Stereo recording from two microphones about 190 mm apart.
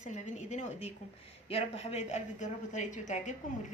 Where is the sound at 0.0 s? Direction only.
40° left (ahead or behind).